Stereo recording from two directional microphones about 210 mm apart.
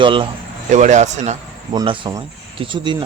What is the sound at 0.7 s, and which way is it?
Speech, 35° right (ahead or behind).